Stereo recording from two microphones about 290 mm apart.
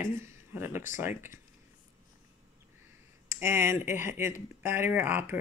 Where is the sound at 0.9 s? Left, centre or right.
Centre.